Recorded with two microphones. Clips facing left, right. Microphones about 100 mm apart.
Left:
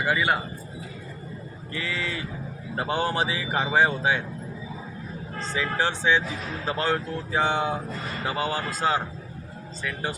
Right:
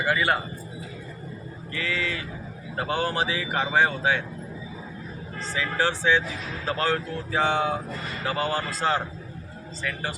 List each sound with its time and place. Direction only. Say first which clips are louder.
0.0 s speech: even; 15° left (ahead or behind)
1.7 s speech: right 1 dB; 25° left (ahead or behind)
5.5 s speech: right 1 dB; 20° left (ahead or behind)